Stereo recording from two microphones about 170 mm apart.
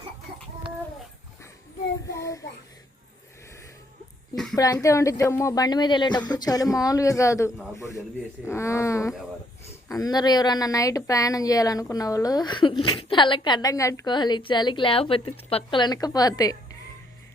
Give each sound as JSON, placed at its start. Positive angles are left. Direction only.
{"t": 2.0, "sound": "child singing", "side_deg": 20}
{"t": 4.5, "sound": "a woman's voice", "side_deg": 20}